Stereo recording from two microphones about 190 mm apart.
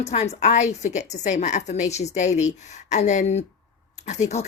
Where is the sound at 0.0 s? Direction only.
35° left (ahead or behind).